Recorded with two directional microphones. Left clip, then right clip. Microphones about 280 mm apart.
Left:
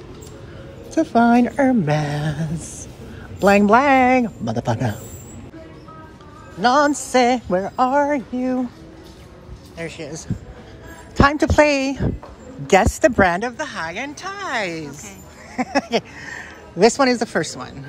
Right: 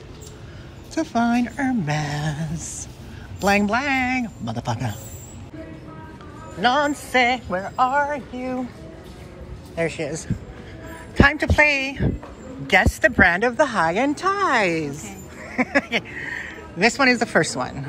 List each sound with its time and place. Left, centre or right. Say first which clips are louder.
0.9 s a woman's voice: left 6 dB; centre
6.6 s speech: left 4 dB; centre
9.8 s speech: right 6 dB; centre
12.0 s a woman's voice: left 1 dB; right
12.7 s speech: left 2 dB; left